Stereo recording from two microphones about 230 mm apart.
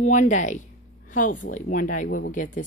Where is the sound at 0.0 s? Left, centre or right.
Left.